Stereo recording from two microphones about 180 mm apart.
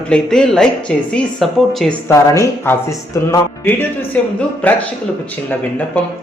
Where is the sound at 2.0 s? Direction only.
15° left (ahead or behind).